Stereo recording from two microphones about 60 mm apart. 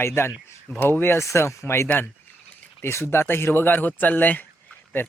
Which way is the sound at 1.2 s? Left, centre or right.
Left.